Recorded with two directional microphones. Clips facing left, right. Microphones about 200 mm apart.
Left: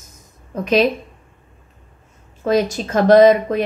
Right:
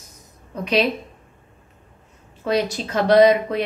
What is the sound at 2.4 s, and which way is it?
A woman's voice, 45° left (ahead or behind).